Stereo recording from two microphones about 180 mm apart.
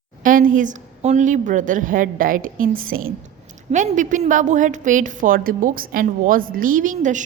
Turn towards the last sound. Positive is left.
turn(degrees=-45)  # may be behind; listen again after turning